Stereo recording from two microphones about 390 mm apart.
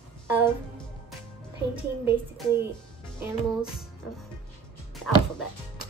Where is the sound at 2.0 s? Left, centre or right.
Centre.